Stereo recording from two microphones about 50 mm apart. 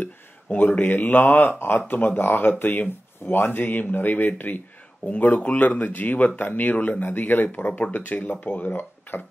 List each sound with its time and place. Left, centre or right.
0.5 s speech: left